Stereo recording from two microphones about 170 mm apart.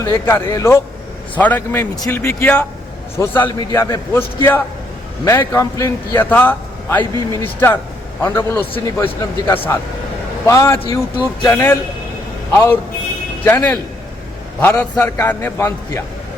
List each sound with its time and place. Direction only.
0.0 s a man's voice: 15° left (ahead or behind)
3.4 s a man's voice: 25° left (ahead or behind)
10.4 s a man's voice: 15° left (ahead or behind)